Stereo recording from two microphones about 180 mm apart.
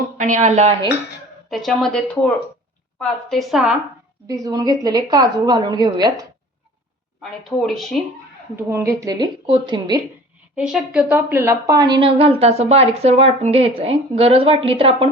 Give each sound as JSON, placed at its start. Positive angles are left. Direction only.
{"t": 0.2, "sound": "speech", "side_deg": -45}
{"t": 1.5, "sound": "speech", "side_deg": 0}
{"t": 4.3, "sound": "a woman's voice", "side_deg": -20}
{"t": 7.2, "sound": "speech", "side_deg": 0}
{"t": 8.5, "sound": "a woman's voice", "side_deg": -15}
{"t": 10.5, "sound": "a woman's voice", "side_deg": -5}